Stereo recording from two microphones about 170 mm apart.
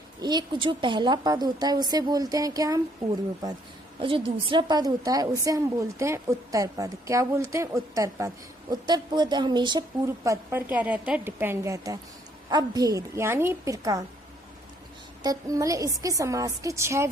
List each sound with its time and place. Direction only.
0.2 s a woman's voice: 25° right (ahead or behind)
4.0 s a woman's voice: 30° right (ahead or behind)
10.2 s a woman's voice: 10° right (ahead or behind)
15.2 s a woman's voice: 20° right (ahead or behind)